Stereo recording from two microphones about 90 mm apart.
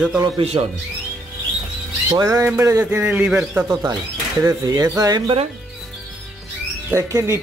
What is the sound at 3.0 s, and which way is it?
Speech, 15° right (ahead or behind).